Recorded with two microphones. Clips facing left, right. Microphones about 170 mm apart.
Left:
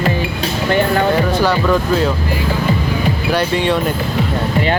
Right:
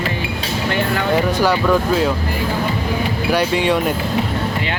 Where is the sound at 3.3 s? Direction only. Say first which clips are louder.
Even; 10° right (ahead or behind).